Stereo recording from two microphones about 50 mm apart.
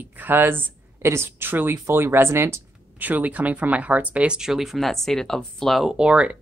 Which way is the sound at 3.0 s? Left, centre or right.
Right.